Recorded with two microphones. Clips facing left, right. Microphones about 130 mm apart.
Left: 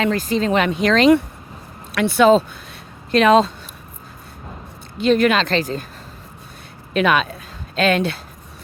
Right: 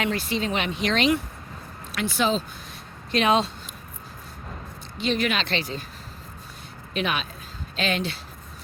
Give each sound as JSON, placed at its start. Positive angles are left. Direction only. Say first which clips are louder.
{"t": 0.0, "sound": "speech", "louder": "left 7 dB", "side_deg": 40}
{"t": 2.0, "sound": "speech", "louder": "left 11 dB", "side_deg": 60}
{"t": 3.1, "sound": "speech", "louder": "left 8 dB", "side_deg": 45}
{"t": 5.0, "sound": "speech", "louder": "left 9 dB", "side_deg": 50}
{"t": 6.9, "sound": "speech", "louder": "left 10 dB", "side_deg": 55}